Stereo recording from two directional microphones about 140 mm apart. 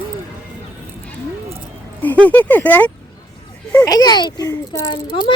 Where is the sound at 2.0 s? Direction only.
10° left (ahead or behind).